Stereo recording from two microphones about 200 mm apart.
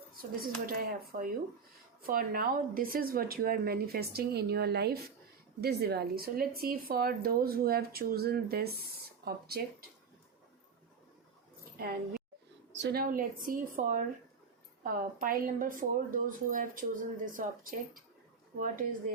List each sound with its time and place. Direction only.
0.2 s speech: 45° right (ahead or behind)
11.8 s a woman's voice: 50° right (ahead or behind)